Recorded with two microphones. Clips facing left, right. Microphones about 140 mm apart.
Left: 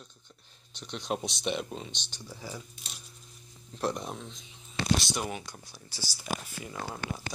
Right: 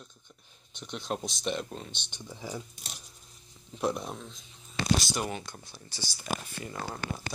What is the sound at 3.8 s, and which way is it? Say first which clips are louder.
Speech: right 1 dB; 10° right (ahead or behind).